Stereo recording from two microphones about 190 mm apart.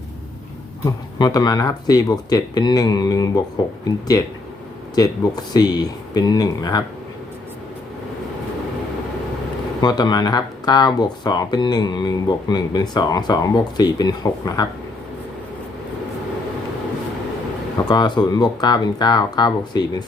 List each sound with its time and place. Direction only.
0.9 s speech: 20° left (ahead or behind)
4.9 s speech: 20° left (ahead or behind)
9.8 s speech: 20° left (ahead or behind)
17.8 s speech: 20° left (ahead or behind)